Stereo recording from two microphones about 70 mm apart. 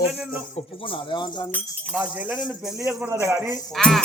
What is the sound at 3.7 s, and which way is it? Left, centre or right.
Speech, centre.